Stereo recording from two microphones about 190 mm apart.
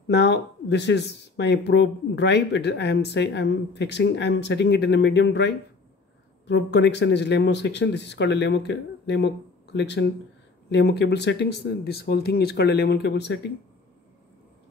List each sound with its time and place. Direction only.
0.1 s speech: 65° left (ahead or behind)